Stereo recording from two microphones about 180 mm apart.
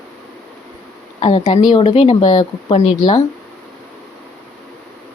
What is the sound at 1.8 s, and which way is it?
Speech, 35° left (ahead or behind).